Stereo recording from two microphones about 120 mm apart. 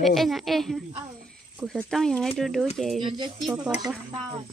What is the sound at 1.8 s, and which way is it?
Speech, 5° left (ahead or behind).